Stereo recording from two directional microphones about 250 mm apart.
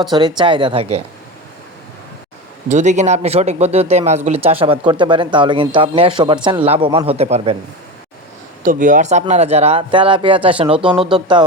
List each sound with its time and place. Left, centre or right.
0.0 s a man's voice: centre
2.6 s a man's voice: right
8.6 s a man's voice: right